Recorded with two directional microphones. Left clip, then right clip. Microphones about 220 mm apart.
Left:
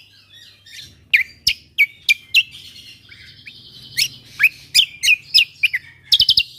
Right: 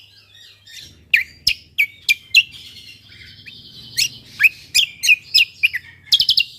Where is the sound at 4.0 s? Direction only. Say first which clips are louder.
Even; 15° left (ahead or behind).